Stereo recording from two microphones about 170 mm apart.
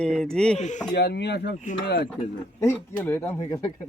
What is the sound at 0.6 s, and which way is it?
Speech, 45° left (ahead or behind).